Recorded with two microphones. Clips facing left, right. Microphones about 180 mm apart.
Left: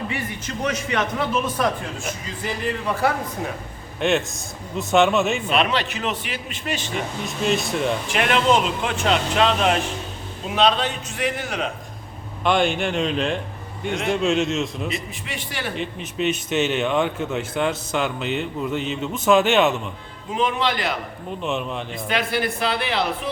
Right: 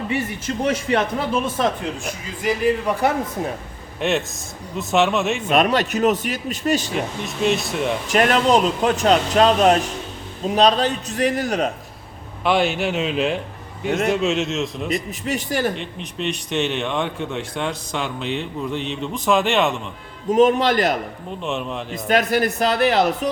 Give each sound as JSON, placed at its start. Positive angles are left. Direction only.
{"t": 0.1, "sound": "a man's voice", "side_deg": -30}
{"t": 2.5, "sound": "a man's voice", "side_deg": -15}
{"t": 4.0, "sound": "a man's voice", "side_deg": 0}
{"t": 5.4, "sound": "speech", "side_deg": -45}
{"t": 6.9, "sound": "a man's voice", "side_deg": 0}
{"t": 8.0, "sound": "speech", "side_deg": -40}
{"t": 12.5, "sound": "a man's voice", "side_deg": -5}
{"t": 15.3, "sound": "speech", "side_deg": -40}
{"t": 15.7, "sound": "a man's voice", "side_deg": 5}
{"t": 20.3, "sound": "speech", "side_deg": -45}
{"t": 21.4, "sound": "a man's voice", "side_deg": 0}
{"t": 21.9, "sound": "speech", "side_deg": -45}